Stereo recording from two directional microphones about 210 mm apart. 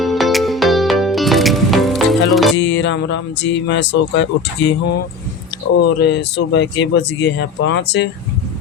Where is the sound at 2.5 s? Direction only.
60° left (ahead or behind).